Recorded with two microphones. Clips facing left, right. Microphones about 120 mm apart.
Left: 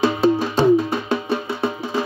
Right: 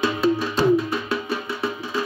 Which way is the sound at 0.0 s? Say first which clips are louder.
Left 4 dB; 30° left (ahead or behind).